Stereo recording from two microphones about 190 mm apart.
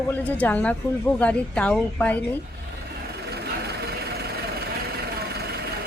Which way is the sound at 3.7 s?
60° right (ahead or behind).